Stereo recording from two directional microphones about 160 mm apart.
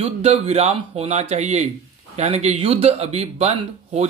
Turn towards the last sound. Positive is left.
turn(degrees=-40)  # may be behind; listen again after turning